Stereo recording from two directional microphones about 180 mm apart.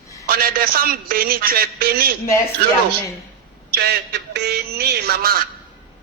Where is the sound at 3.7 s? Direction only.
65° right (ahead or behind).